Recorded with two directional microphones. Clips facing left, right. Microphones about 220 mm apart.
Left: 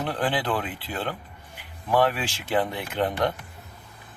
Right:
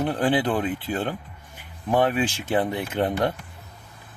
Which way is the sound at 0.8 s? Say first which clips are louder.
Right 4 dB; 45° right (ahead or behind).